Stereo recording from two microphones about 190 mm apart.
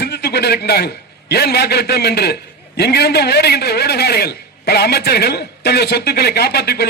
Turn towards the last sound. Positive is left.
turn(degrees=55)  # may be behind; listen again after turning